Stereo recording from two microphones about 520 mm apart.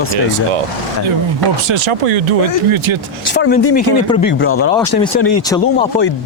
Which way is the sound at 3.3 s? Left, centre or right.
Centre.